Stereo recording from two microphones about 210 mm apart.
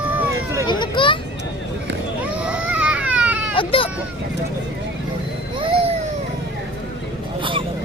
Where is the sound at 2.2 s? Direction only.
5° right (ahead or behind).